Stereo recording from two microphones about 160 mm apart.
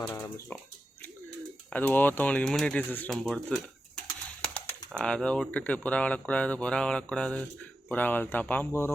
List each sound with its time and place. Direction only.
0.1 s a sound: 20° left (ahead or behind)
1.7 s speech: 10° left (ahead or behind)
4.0 s bird: 5° left (ahead or behind)
4.9 s speech: 5° left (ahead or behind)